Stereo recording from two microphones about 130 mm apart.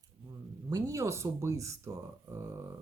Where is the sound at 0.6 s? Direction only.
25° right (ahead or behind).